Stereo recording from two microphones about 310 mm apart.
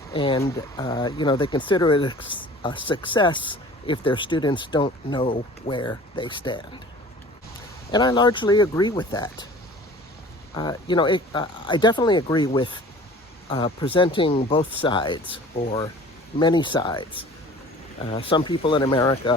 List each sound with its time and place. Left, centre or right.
0.1 s speech: centre
7.9 s speech: centre
10.5 s speech: centre